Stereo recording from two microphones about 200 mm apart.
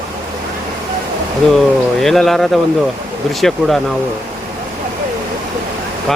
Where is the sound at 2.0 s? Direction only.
Centre (ahead or behind).